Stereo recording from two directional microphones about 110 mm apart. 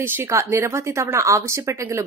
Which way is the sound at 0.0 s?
20° right (ahead or behind).